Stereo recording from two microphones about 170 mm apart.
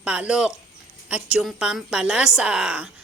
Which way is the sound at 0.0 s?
5° right (ahead or behind).